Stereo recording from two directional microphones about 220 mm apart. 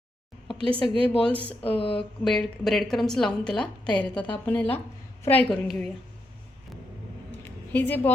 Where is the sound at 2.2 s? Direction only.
Centre (ahead or behind).